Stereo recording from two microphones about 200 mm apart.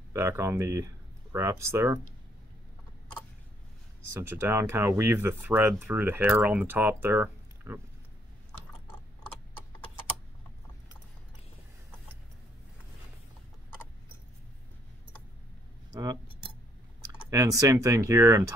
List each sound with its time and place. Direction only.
0.1 s speech: 15° right (ahead or behind)
4.1 s speech: 15° right (ahead or behind)
15.9 s cutlery: 20° right (ahead or behind)
17.3 s speech: 15° right (ahead or behind)